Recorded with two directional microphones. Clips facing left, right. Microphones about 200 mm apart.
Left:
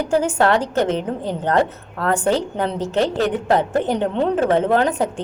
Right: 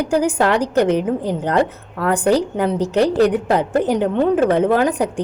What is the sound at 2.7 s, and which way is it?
Speech, 20° left (ahead or behind).